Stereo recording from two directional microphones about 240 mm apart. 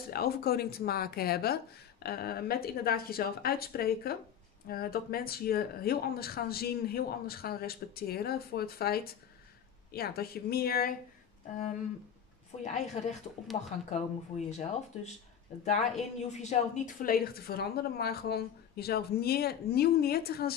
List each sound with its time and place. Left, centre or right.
0.1 s a woman's voice: left
12.6 s a woman's voice: left